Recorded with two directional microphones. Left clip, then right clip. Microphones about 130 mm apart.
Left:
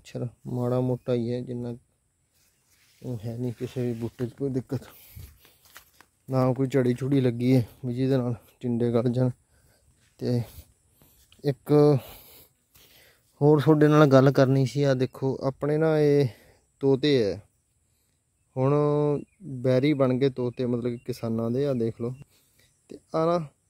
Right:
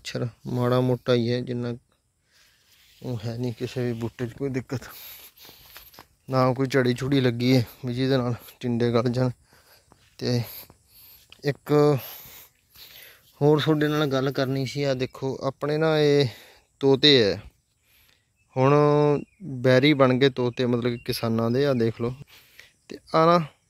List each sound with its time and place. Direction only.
0.0 s speech: 10° left (ahead or behind)
3.2 s speech: 15° left (ahead or behind)
4.2 s speech: 40° left (ahead or behind)
6.3 s speech: 25° left (ahead or behind)
11.2 s speech: 45° left (ahead or behind); by 12.4 s 65° left (ahead or behind)
12.9 s a sound: 25° left (ahead or behind)
13.6 s speech: 60° left (ahead or behind); by 17.5 s 10° left (ahead or behind)
18.5 s speech: 5° left (ahead or behind)